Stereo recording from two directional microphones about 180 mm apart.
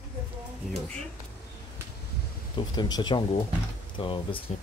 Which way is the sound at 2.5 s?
25° left (ahead or behind).